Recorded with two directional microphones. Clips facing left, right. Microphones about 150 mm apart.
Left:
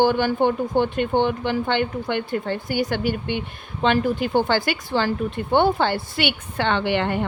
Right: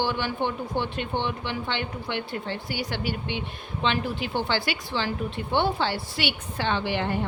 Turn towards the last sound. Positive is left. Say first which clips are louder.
# left 5 dB
turn(degrees=70)  # may be behind; listen again after turning